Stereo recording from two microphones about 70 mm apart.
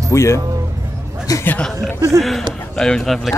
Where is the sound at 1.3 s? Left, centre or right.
Left.